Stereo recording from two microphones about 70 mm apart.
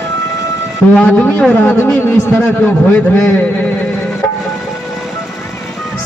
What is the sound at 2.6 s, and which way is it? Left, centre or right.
Speech, left.